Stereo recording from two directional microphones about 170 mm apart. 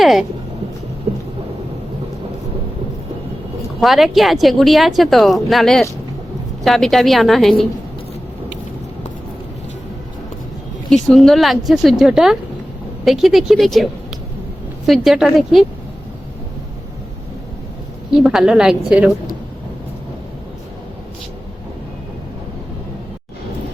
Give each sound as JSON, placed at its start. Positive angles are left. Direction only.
{"t": 0.0, "sound": "speech", "side_deg": 0}
{"t": 3.8, "sound": "a woman's voice", "side_deg": 0}
{"t": 10.8, "sound": "a woman's voice", "side_deg": 0}
{"t": 14.8, "sound": "a woman's voice", "side_deg": 0}
{"t": 18.2, "sound": "a woman's voice", "side_deg": -5}